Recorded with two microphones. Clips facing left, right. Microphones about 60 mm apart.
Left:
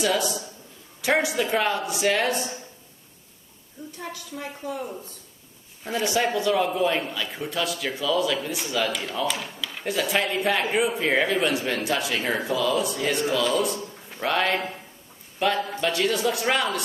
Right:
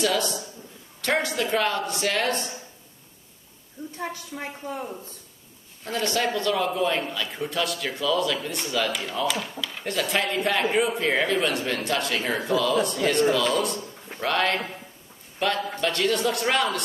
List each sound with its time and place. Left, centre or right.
0.0 s a man's voice: centre
4.0 s a woman's voice: right
5.9 s a man's voice: centre